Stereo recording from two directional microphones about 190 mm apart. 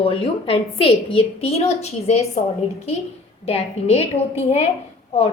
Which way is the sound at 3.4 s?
35° left (ahead or behind).